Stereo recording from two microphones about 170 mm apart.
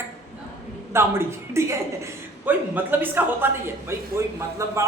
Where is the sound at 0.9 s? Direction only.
15° right (ahead or behind).